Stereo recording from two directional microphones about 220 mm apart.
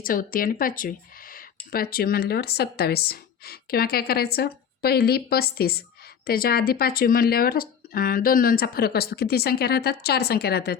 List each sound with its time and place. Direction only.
0.0 s speech: 40° left (ahead or behind)